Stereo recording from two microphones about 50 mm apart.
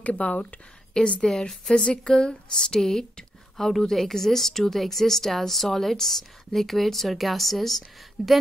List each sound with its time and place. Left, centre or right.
0.0 s speech: left
0.9 s speech: centre